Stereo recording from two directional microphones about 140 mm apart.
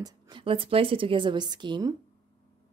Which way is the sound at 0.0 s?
35° right (ahead or behind).